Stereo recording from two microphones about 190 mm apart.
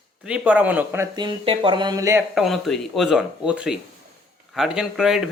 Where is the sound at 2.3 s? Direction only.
Centre (ahead or behind).